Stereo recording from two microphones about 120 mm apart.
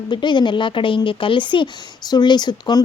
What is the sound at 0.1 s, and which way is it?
Speech, 40° left (ahead or behind).